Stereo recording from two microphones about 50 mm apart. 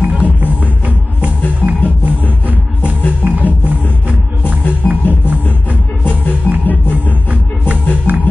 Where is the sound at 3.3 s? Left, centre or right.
Right.